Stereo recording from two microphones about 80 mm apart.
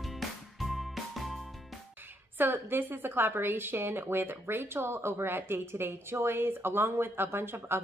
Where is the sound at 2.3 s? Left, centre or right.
Right.